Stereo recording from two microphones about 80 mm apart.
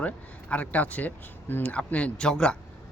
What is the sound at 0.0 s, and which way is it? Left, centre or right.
A man's voice, centre.